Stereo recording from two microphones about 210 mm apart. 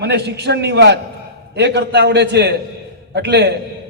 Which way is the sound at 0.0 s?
50° right (ahead or behind).